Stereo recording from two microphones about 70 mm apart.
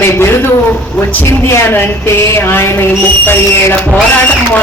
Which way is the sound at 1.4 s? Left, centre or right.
Left.